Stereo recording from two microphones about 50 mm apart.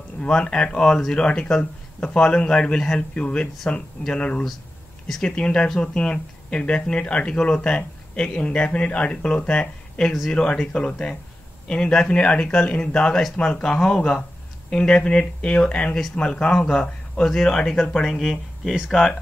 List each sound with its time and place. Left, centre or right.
0.2 s speech: centre
5.0 s speech: centre
5.3 s speech: centre
18.2 s speech: centre